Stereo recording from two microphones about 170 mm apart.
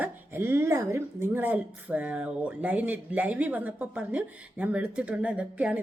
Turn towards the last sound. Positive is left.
turn(degrees=-10)  # may be behind; listen again after turning